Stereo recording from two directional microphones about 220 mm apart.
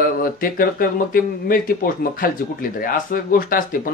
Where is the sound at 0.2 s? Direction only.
40° left (ahead or behind).